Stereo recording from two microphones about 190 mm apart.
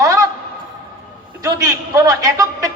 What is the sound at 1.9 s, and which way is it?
Speech, 20° right (ahead or behind).